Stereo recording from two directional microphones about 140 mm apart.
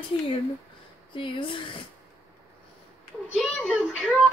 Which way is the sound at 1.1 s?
35° left (ahead or behind).